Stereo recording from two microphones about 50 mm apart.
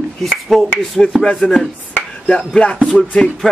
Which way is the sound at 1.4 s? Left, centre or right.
Centre.